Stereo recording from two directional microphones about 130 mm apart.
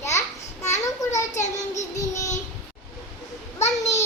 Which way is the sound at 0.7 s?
25° left (ahead or behind).